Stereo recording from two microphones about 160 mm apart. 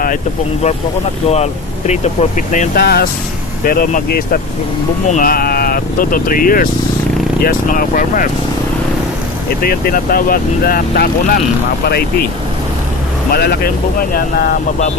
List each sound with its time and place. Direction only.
2.7 s speech: 75° left (ahead or behind)
3.6 s speech: 65° left (ahead or behind)
9.6 s speech: 65° left (ahead or behind)
13.3 s speech: 70° left (ahead or behind)